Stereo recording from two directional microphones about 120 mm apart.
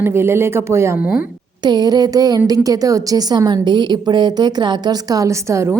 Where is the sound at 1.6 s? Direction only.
35° right (ahead or behind).